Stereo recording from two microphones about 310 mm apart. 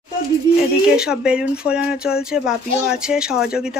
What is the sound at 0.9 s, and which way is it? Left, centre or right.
Speech, centre.